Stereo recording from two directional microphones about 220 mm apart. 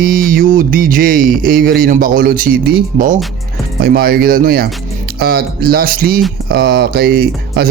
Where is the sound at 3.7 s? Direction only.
45° right (ahead or behind).